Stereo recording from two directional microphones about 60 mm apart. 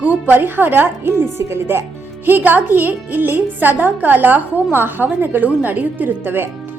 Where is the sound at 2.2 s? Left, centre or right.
Right.